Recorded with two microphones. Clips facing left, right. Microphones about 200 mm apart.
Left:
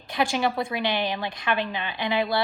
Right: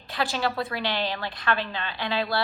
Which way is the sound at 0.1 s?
15° left (ahead or behind).